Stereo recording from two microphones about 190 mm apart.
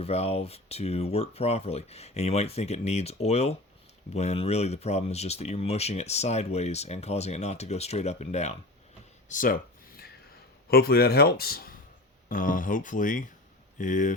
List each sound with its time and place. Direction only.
0.0 s speech: 35° left (ahead or behind)
9.3 s a sound: 45° left (ahead or behind)
10.7 s speech: 55° left (ahead or behind)